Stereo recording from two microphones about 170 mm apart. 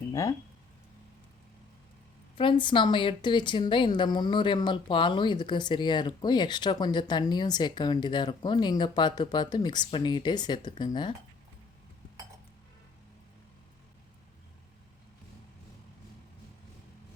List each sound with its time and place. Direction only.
0.1 s speech: 20° left (ahead or behind)
2.4 s a woman's voice: 30° left (ahead or behind)